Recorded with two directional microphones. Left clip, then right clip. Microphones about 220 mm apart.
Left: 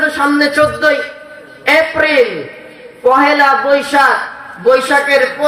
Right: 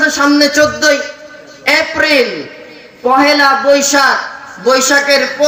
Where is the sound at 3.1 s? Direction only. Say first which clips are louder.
Right 2 dB; 50° right (ahead or behind).